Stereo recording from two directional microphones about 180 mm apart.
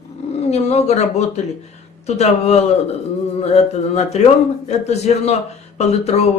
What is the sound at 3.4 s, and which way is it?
A man's voice, 35° left (ahead or behind).